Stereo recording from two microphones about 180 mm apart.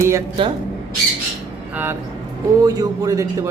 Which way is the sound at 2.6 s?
20° right (ahead or behind).